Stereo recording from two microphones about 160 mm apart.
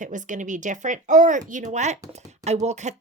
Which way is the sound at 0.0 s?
50° right (ahead or behind).